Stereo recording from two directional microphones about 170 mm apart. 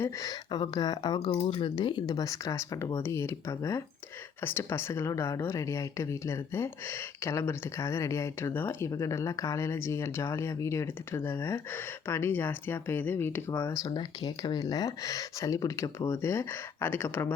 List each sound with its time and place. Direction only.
0.0 s speech: 20° left (ahead or behind)
13.8 s speech: 25° left (ahead or behind)